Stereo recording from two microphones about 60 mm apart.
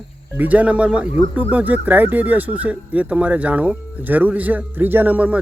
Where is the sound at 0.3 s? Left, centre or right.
Right.